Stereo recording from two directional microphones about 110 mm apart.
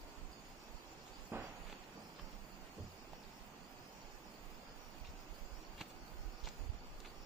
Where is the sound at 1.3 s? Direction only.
20° right (ahead or behind).